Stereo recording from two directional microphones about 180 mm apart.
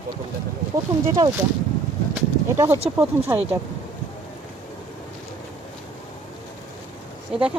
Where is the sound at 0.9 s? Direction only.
20° right (ahead or behind).